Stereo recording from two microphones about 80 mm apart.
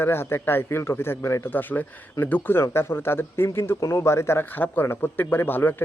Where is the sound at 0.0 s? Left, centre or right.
Left.